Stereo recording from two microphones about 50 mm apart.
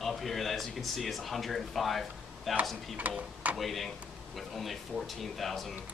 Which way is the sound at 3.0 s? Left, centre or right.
Right.